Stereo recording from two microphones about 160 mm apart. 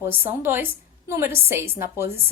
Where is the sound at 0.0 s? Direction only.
15° right (ahead or behind).